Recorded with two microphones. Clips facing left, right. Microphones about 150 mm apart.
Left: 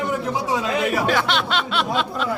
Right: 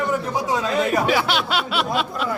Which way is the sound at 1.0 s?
5° right (ahead or behind).